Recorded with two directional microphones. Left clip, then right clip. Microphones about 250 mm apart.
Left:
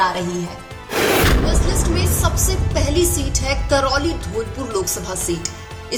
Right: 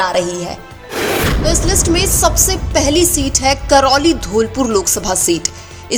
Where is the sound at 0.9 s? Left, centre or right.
Centre.